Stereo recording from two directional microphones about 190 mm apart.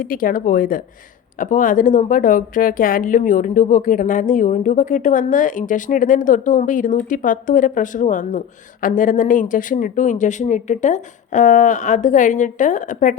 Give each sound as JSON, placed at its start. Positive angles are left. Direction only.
{"t": 0.0, "sound": "a woman's voice", "side_deg": 50}